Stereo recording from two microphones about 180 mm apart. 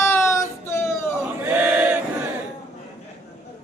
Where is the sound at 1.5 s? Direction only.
10° right (ahead or behind).